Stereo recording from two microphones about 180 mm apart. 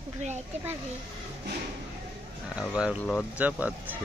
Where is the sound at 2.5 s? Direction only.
5° right (ahead or behind).